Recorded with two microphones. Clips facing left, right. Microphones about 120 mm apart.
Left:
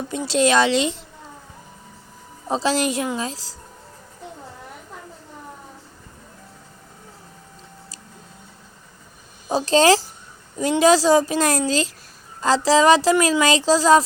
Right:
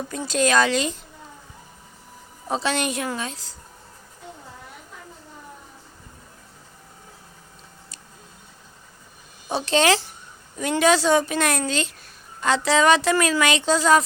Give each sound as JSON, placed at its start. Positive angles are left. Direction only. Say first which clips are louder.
{"t": 0.3, "sound": "speech", "louder": "left 2 dB", "side_deg": 25}
{"t": 2.5, "sound": "a woman's voice", "louder": "left 3 dB", "side_deg": 30}
{"t": 9.5, "sound": "a woman's voice", "louder": "left 4 dB", "side_deg": 40}